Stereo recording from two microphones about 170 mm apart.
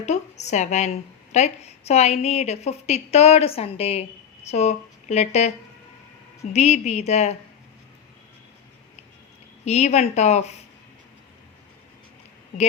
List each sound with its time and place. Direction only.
0.0 s a woman's voice: 40° left (ahead or behind)
9.6 s a woman's voice: 40° left (ahead or behind)